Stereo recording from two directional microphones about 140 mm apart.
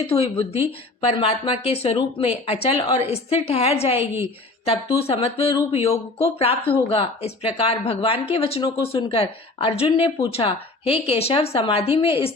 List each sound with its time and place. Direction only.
0.1 s speech: 45° left (ahead or behind)